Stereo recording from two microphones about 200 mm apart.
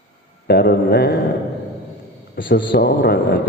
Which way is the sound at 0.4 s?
50° left (ahead or behind).